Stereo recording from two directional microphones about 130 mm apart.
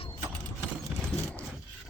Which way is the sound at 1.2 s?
15° left (ahead or behind).